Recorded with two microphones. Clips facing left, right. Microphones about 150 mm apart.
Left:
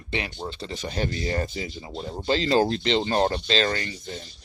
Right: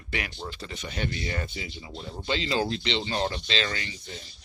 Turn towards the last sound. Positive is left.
turn(degrees=45)  # may be behind; listen again after turning